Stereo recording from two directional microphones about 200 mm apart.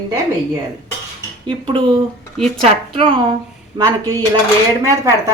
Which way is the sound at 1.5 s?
25° right (ahead or behind).